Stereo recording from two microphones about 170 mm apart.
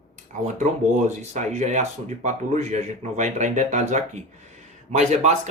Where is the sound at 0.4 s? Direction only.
45° right (ahead or behind).